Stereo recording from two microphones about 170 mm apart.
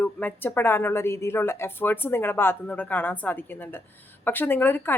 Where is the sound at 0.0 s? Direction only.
10° left (ahead or behind).